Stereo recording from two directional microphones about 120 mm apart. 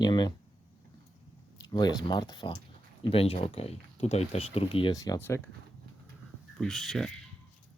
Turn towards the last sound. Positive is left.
turn(degrees=0)  # may be behind; listen again after turning